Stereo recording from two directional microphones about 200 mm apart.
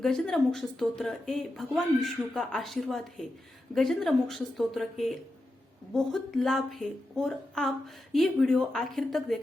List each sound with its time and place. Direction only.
0.0 s speech: centre (ahead or behind)